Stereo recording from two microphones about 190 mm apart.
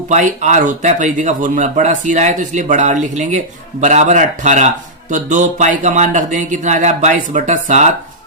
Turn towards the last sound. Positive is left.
turn(degrees=-40)  # may be behind; listen again after turning